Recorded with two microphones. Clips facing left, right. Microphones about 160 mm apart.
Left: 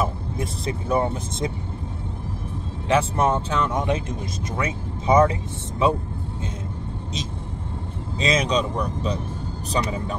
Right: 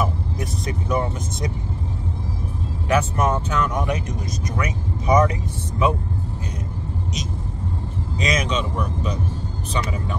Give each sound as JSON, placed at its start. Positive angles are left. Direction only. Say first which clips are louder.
{"t": 0.0, "sound": "speech", "louder": "right 1 dB", "side_deg": 25}
{"t": 2.9, "sound": "speech", "louder": "even", "side_deg": 30}
{"t": 8.2, "sound": "speech", "louder": "left 2 dB", "side_deg": 30}